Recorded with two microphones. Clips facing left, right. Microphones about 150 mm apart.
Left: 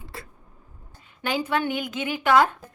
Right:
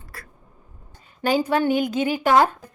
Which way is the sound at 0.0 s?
25° left (ahead or behind).